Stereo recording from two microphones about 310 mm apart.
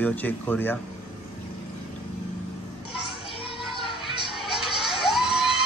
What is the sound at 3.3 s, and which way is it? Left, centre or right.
Music, centre.